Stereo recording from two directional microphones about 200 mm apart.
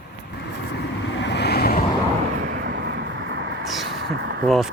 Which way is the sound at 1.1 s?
60° left (ahead or behind).